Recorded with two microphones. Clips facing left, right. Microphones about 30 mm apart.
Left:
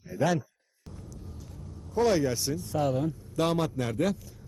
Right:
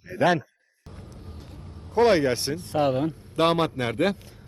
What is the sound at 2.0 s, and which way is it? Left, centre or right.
Speech, right.